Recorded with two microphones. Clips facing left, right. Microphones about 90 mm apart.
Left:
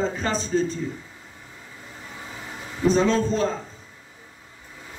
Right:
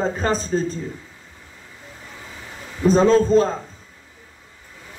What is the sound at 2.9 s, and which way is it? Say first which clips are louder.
Speech: right 10 dB; 40° right (ahead or behind).